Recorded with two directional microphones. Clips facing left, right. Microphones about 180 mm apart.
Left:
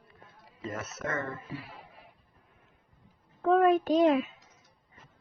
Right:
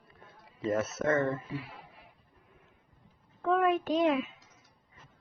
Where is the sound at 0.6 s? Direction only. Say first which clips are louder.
Right 7 dB; 30° right (ahead or behind).